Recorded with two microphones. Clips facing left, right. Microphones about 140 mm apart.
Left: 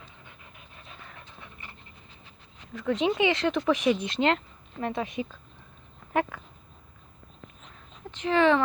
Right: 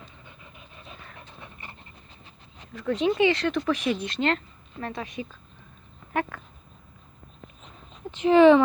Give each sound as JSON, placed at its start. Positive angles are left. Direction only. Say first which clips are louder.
{"t": 2.9, "sound": "speech", "louder": "right 2 dB", "side_deg": 15}
{"t": 6.3, "sound": "a sound", "louder": "right 1 dB", "side_deg": 15}
{"t": 8.1, "sound": "speech", "louder": "right 7 dB", "side_deg": -10}